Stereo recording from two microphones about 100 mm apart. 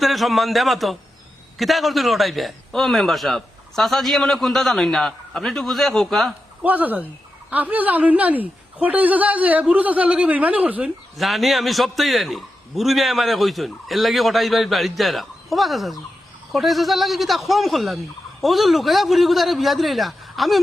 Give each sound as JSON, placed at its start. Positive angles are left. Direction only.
{"t": 0.0, "sound": "a man's voice", "side_deg": 0}
{"t": 6.6, "sound": "a woman's voice", "side_deg": -15}
{"t": 11.2, "sound": "a man's voice", "side_deg": 0}